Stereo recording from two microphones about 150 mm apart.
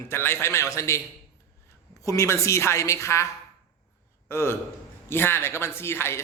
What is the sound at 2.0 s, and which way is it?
Speech, 20° left (ahead or behind).